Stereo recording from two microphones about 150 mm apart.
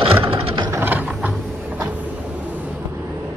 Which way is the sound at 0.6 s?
15° right (ahead or behind).